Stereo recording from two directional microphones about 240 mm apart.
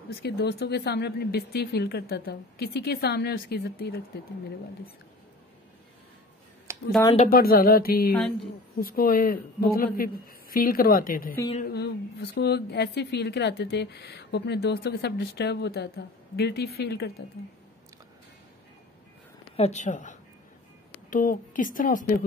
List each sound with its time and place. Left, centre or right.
0.1 s speech: left
6.7 s a sound: centre
7.2 s a woman's voice: left
19.5 s speech: left